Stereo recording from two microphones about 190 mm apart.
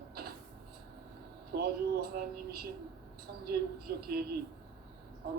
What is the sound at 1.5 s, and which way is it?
A man's voice, 55° right (ahead or behind).